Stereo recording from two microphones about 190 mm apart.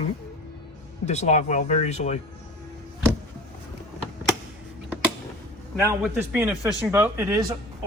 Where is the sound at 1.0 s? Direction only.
35° left (ahead or behind).